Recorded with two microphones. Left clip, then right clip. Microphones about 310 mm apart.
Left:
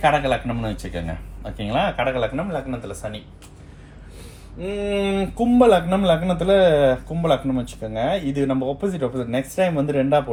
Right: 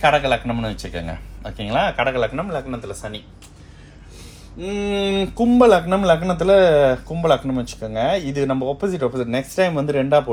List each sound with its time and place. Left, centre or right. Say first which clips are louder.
0.0 s speech: right 2 dB; right
4.6 s speech: right 1 dB; right